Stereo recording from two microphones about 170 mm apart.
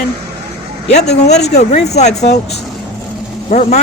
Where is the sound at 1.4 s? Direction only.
40° left (ahead or behind).